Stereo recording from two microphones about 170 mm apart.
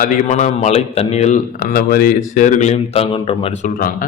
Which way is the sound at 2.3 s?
45° left (ahead or behind).